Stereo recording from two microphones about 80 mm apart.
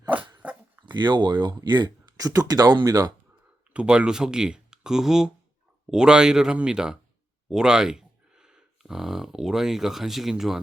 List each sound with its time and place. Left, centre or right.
0.4 s dog: centre
0.9 s speech: right
3.7 s speech: centre